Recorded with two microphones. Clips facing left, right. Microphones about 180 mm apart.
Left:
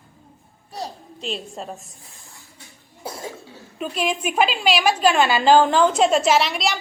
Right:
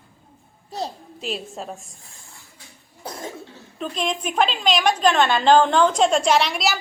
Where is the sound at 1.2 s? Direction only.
Centre (ahead or behind).